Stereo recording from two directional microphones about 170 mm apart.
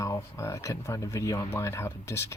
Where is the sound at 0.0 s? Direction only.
15° left (ahead or behind).